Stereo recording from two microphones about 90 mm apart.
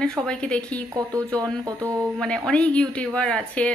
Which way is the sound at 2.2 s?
10° left (ahead or behind).